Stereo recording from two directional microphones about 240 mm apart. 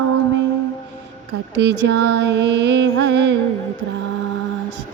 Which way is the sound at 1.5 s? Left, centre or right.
Right.